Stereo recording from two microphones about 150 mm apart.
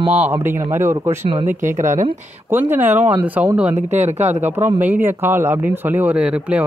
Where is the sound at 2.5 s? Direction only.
15° right (ahead or behind).